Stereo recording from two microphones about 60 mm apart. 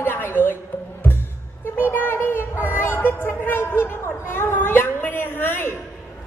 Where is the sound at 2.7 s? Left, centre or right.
Left.